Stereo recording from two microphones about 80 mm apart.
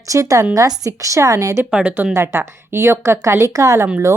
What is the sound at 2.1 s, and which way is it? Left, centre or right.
A woman's voice, right.